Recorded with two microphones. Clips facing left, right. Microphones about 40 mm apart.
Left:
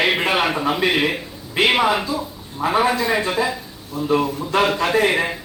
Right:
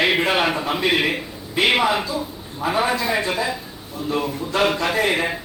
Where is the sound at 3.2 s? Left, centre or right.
Centre.